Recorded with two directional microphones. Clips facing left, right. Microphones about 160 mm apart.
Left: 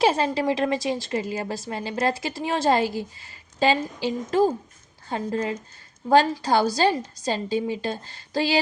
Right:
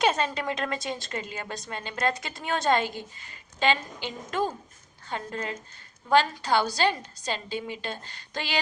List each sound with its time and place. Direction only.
0.0 s a woman's voice: 30° left (ahead or behind)